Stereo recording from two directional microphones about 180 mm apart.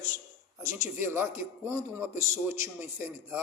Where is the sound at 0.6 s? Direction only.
15° right (ahead or behind).